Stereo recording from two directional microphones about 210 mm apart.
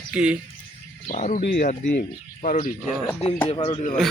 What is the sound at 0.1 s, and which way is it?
Speech, 5° right (ahead or behind).